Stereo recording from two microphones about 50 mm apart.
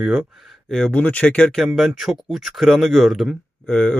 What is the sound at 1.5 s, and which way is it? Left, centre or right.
Speech, centre.